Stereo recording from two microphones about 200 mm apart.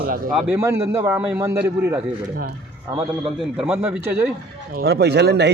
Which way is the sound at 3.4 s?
5° right (ahead or behind).